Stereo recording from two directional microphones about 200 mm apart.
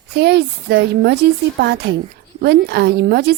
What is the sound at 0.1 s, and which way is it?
A woman's voice, 55° right (ahead or behind).